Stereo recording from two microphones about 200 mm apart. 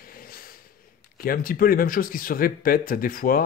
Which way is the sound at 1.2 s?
45° left (ahead or behind).